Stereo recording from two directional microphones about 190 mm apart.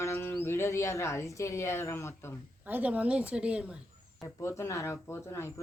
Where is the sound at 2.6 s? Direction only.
10° right (ahead or behind).